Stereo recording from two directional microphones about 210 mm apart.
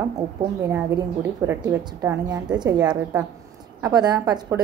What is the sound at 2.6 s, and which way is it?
A woman's voice, 20° right (ahead or behind).